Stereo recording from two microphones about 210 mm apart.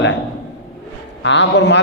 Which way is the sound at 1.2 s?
60° left (ahead or behind).